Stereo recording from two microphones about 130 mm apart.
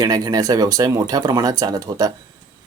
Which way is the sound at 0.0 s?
30° right (ahead or behind).